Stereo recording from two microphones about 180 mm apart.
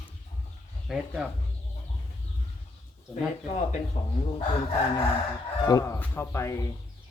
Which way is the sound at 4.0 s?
30° left (ahead or behind).